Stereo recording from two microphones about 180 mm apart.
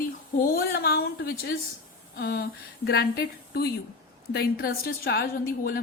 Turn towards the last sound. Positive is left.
turn(degrees=55)  # may be behind; listen again after turning